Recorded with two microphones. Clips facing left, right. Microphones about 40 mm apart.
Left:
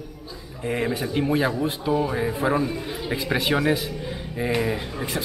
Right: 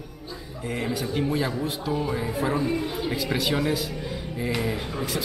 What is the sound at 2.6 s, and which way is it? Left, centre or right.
Speech, centre.